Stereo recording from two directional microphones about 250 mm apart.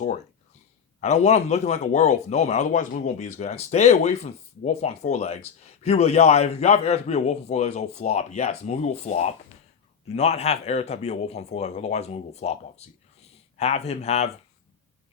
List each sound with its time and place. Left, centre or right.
1.0 s speech: left